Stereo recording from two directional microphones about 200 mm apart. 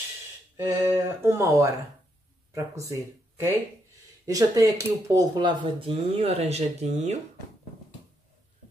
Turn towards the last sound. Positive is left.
turn(degrees=-35)  # may be behind; listen again after turning